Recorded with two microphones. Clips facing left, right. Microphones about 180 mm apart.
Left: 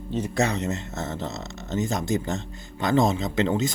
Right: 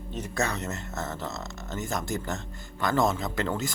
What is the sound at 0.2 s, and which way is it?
Speech, 15° left (ahead or behind).